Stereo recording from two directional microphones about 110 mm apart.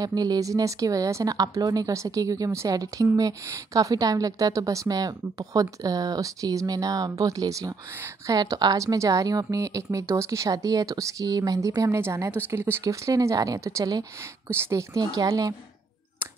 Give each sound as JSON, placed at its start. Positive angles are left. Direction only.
{"t": 0.0, "sound": "speech", "side_deg": -35}